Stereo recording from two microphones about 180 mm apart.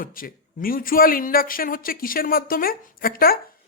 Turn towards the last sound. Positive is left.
turn(degrees=55)  # may be behind; listen again after turning